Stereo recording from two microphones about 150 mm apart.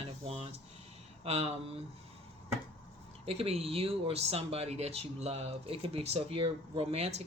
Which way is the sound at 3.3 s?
40° right (ahead or behind).